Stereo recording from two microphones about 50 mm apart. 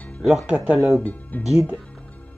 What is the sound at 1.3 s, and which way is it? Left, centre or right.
Speech, left.